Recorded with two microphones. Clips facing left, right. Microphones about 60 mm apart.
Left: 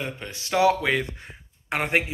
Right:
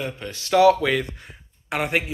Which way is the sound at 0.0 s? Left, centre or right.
Left.